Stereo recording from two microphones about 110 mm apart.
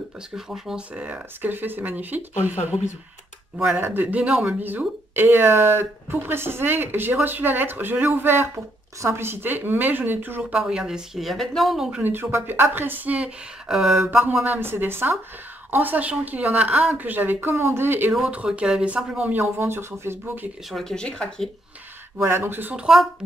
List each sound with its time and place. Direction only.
0.5 s speech: 10° right (ahead or behind)
3.7 s speech: 20° right (ahead or behind)
10.6 s a woman's voice: 5° right (ahead or behind)
12.0 s speech: 20° right (ahead or behind); by 14.1 s 5° right (ahead or behind)
14.1 s speech: 20° right (ahead or behind)
18.1 s speech: 5° right (ahead or behind)
20.7 s speech: 5° left (ahead or behind)
22.2 s speech: 20° right (ahead or behind)